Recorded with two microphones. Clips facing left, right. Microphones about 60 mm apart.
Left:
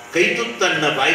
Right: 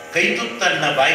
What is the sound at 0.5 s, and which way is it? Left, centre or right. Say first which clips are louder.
Speech: even; right.